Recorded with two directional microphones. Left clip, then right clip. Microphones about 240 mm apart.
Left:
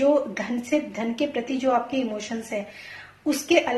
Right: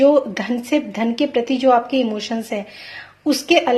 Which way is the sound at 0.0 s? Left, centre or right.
Right.